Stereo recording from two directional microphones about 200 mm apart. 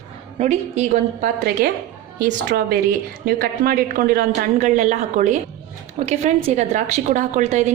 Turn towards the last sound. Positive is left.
turn(degrees=-35)  # may be behind; listen again after turning